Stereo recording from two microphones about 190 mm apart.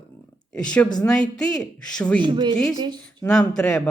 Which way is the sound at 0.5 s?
5° left (ahead or behind).